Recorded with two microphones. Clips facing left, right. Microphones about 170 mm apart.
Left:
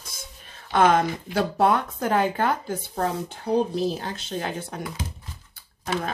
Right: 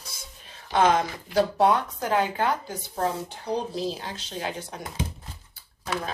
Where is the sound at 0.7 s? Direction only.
55° left (ahead or behind).